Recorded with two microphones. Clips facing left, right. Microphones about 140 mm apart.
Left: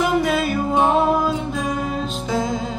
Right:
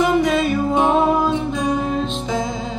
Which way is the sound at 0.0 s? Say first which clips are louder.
Right 2 dB; 5° left (ahead or behind).